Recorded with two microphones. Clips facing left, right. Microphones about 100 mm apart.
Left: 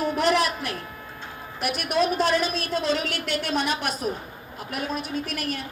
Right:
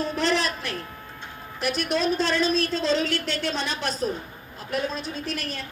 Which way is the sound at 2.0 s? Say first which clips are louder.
Left 4 dB; 30° right (ahead or behind).